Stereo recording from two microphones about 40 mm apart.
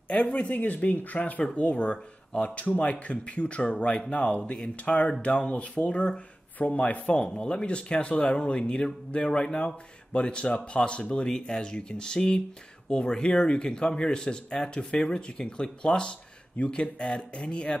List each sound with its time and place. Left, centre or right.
0.1 s speech: left